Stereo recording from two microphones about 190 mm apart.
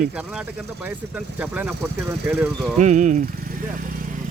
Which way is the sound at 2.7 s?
40° right (ahead or behind).